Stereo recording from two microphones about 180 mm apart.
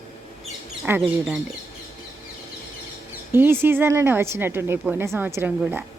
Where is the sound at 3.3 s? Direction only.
10° right (ahead or behind).